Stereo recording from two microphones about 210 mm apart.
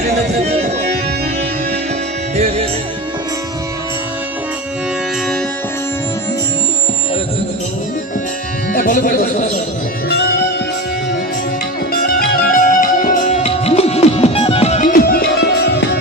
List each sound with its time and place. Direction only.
0.4 s music: 30° right (ahead or behind)
2.3 s music: 30° right (ahead or behind)
8.7 s music: 40° left (ahead or behind)
11.9 s music: 45° left (ahead or behind)